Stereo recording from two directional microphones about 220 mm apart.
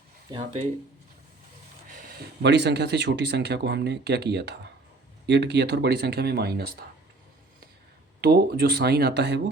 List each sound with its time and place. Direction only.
1.9 s speech: 40° right (ahead or behind)
8.2 s speech: 45° right (ahead or behind)